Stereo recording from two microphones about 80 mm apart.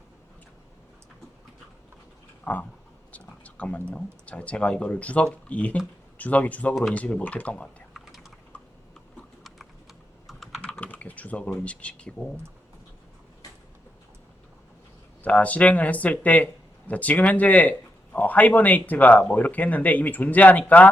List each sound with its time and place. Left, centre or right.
2.4 s a sound: centre
3.1 s speech: centre
7.9 s typing: centre
10.2 s computer keyboard: centre
10.6 s speech: centre
15.2 s speech: centre